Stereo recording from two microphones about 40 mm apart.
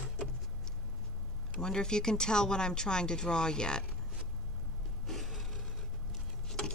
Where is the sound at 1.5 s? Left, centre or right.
Centre.